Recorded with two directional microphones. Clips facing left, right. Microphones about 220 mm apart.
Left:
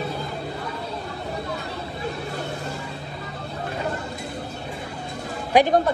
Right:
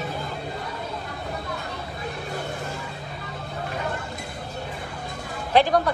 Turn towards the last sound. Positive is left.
turn(degrees=15)  # may be behind; listen again after turning